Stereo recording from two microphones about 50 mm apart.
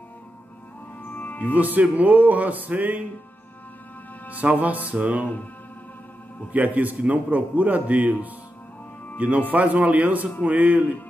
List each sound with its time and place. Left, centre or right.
1.1 s music: left
1.5 s a man's voice: right
4.3 s a man's voice: right
6.5 s a man's voice: right